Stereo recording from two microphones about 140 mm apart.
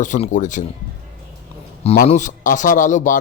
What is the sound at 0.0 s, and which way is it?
Speech, 60° left (ahead or behind).